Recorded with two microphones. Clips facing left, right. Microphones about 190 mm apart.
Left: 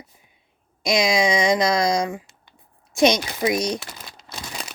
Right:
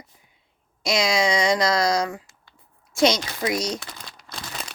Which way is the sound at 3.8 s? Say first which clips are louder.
Left 1 dB; 5° left (ahead or behind).